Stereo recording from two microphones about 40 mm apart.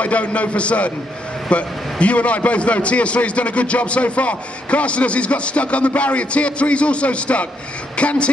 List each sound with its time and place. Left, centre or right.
0.0 s a man's voice: left